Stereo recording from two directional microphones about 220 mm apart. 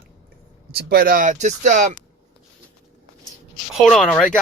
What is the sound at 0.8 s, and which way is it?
Speech, 45° right (ahead or behind).